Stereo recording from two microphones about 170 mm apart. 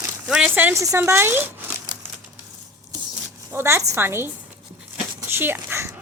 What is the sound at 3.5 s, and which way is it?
Speech, 15° right (ahead or behind).